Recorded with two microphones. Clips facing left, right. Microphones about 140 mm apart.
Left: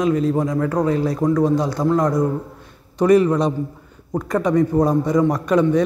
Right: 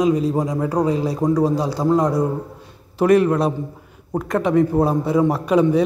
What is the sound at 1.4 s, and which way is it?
Speech, 35° right (ahead or behind).